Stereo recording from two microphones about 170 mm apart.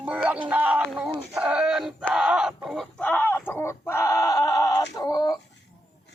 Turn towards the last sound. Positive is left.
turn(degrees=20)  # may be behind; listen again after turning